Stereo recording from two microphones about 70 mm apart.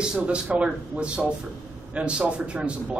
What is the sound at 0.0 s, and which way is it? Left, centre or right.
Speech, centre.